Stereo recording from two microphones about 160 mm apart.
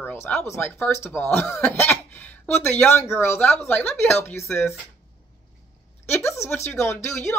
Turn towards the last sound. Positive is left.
turn(degrees=15)  # may be behind; listen again after turning